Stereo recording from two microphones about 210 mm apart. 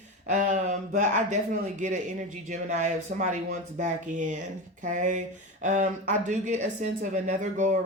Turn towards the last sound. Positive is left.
turn(degrees=-35)  # may be behind; listen again after turning